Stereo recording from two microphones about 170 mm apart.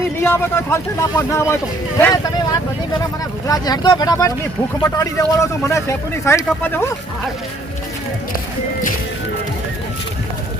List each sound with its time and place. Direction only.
0.2 s a man's voice: 15° left (ahead or behind)